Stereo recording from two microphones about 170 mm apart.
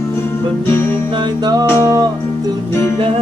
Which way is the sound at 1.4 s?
25° right (ahead or behind).